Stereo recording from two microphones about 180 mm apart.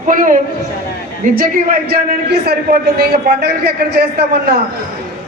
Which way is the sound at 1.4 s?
55° right (ahead or behind).